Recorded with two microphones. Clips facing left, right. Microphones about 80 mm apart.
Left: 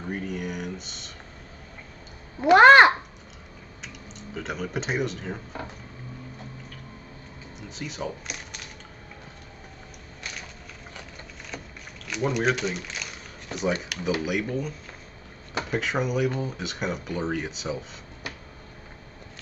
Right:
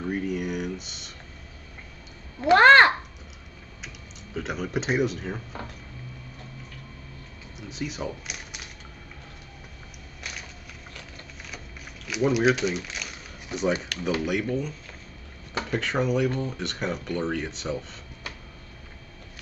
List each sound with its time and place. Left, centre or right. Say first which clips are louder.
0.1 s speech: right 2 dB; centre
2.4 s a child's voice: left 2 dB; centre
4.4 s speech: right 2 dB; centre
7.5 s speech: right 3 dB; centre
12.1 s a sound: right 3 dB; centre
14.2 s speech: right 1 dB; centre